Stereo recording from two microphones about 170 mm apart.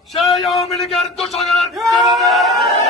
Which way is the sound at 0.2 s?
Centre (ahead or behind).